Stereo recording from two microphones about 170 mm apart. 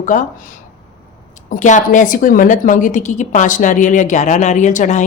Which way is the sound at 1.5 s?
45° left (ahead or behind).